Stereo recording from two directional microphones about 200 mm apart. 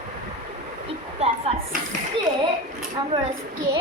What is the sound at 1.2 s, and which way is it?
Speech, 30° right (ahead or behind).